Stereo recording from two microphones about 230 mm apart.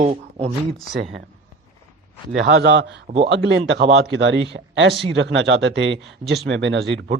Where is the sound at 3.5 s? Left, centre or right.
Right.